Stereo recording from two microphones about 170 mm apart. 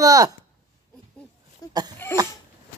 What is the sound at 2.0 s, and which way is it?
Cough, 15° left (ahead or behind).